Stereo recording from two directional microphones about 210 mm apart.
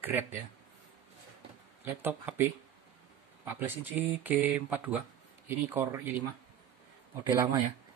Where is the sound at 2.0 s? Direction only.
10° right (ahead or behind).